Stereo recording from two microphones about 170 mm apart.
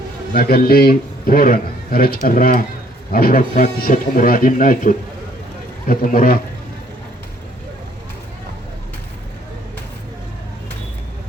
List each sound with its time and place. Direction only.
0.3 s speech: 65° left (ahead or behind)